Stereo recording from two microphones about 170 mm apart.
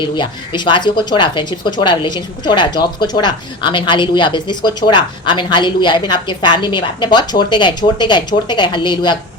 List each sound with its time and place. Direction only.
0.0 s speech: 25° left (ahead or behind)